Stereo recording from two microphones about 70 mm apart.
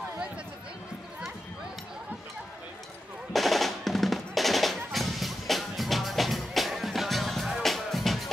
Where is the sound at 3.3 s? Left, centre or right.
Centre.